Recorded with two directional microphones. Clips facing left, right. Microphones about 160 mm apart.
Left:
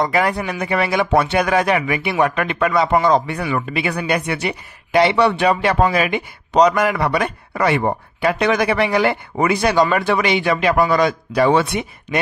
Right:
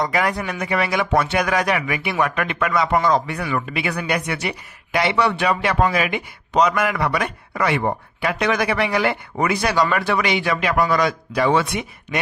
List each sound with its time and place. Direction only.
0.0 s speech: 30° left (ahead or behind)